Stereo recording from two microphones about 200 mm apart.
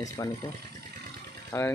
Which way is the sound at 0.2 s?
15° left (ahead or behind).